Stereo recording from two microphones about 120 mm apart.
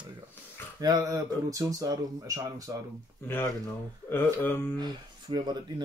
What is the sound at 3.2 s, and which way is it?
Speech, 20° left (ahead or behind).